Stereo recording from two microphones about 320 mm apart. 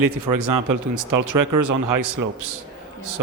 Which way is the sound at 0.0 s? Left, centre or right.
Right.